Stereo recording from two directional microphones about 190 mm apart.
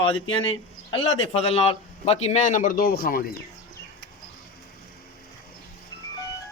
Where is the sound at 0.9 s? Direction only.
30° left (ahead or behind); by 3.2 s 50° left (ahead or behind).